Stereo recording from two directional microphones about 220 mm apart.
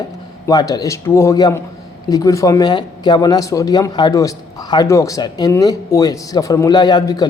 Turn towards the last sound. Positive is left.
turn(degrees=20)  # may be behind; listen again after turning